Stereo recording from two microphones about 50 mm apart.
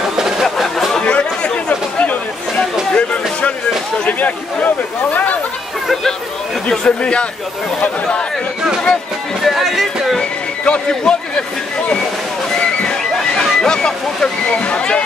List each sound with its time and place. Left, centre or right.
0.2 s a sound: centre
1.0 s chatter: left
2.9 s music: left
4.0 s a sound: left
6.7 s a man's voice: centre
9.4 s music: centre
10.6 s a man's voice: centre
12.5 s slosh: centre